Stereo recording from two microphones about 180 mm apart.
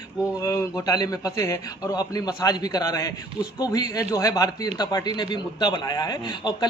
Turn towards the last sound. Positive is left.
turn(degrees=25)  # may be behind; listen again after turning